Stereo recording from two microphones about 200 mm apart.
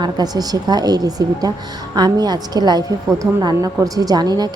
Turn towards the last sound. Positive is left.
turn(degrees=-20)  # may be behind; listen again after turning